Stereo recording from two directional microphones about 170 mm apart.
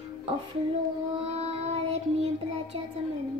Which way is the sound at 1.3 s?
40° right (ahead or behind).